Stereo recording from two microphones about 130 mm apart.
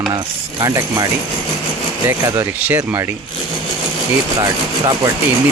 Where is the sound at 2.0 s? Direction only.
15° right (ahead or behind).